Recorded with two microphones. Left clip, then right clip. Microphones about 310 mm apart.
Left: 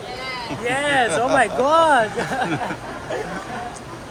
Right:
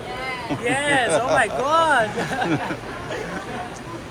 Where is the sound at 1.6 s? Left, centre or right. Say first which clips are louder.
Left 4 dB; left.